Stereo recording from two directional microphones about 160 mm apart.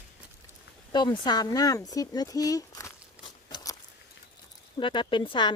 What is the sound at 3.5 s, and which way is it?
Biting, 20° left (ahead or behind).